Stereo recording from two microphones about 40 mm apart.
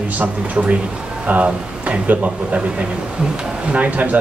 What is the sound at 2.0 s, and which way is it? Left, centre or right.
Speech, right.